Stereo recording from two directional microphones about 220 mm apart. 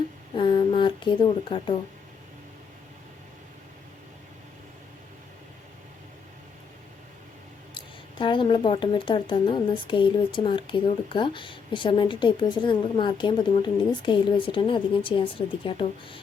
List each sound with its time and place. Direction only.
0.3 s speech: 20° left (ahead or behind)
7.7 s speech: 20° left (ahead or behind)